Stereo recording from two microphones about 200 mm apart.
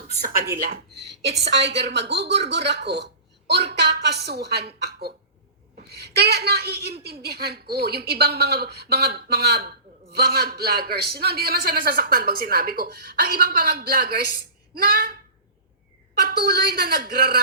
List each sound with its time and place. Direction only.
0.3 s a woman's voice: 50° right (ahead or behind)
16.2 s a woman's voice: 50° right (ahead or behind)